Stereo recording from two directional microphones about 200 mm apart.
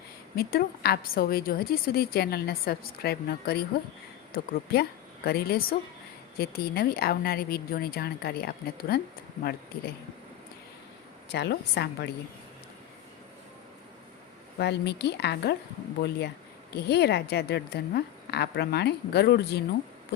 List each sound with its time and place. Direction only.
0.3 s a woman's voice: 50° left (ahead or behind)
11.3 s a woman's voice: 55° left (ahead or behind)
14.6 s a woman's voice: 55° left (ahead or behind)
16.7 s a woman's voice: 55° left (ahead or behind)